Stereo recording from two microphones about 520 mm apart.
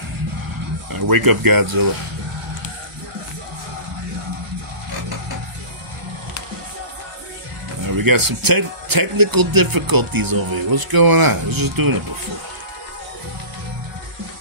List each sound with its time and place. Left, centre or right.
0.9 s speech: right
8.0 s speech: right